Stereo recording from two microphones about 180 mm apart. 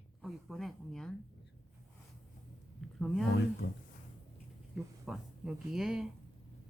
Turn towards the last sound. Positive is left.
turn(degrees=-5)  # may be behind; listen again after turning